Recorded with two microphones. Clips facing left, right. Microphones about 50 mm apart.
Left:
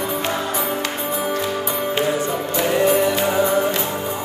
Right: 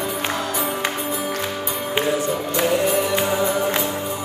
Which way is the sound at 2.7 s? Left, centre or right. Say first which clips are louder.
Left 4 dB; left.